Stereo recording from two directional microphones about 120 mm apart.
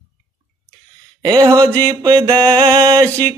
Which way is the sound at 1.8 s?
35° right (ahead or behind).